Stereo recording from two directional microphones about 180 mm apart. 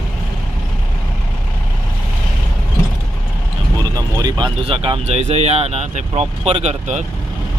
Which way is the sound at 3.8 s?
20° right (ahead or behind).